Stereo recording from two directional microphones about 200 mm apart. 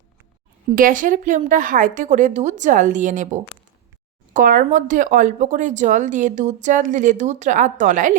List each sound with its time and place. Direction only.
0.8 s speech: 40° right (ahead or behind)